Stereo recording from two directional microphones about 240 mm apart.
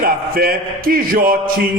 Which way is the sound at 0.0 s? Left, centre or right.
Right.